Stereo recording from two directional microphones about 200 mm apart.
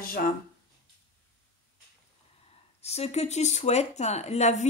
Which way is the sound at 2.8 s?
30° left (ahead or behind).